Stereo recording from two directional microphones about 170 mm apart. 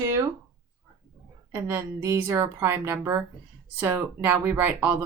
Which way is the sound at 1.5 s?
15° right (ahead or behind).